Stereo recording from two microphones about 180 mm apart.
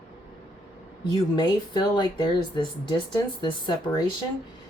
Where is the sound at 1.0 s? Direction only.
25° left (ahead or behind).